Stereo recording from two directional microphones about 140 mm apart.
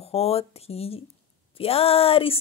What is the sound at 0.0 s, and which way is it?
A woman's voice, 45° left (ahead or behind).